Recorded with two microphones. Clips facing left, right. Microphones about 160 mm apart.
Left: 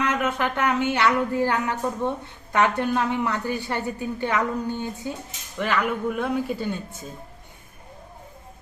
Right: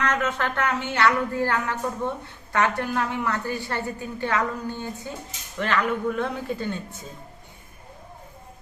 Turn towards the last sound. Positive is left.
turn(degrees=10)  # may be behind; listen again after turning